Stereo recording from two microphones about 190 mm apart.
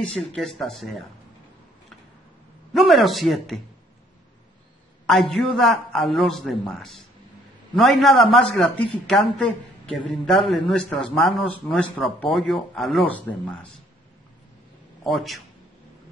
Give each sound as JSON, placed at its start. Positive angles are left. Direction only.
{"t": 0.0, "sound": "a man's voice", "side_deg": 5}
{"t": 2.7, "sound": "speech", "side_deg": 0}
{"t": 5.0, "sound": "a man's voice", "side_deg": 0}
{"t": 15.0, "sound": "a man's voice", "side_deg": 0}